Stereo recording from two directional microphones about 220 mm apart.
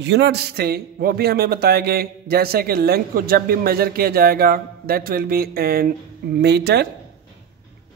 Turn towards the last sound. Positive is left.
turn(degrees=-45)  # may be behind; listen again after turning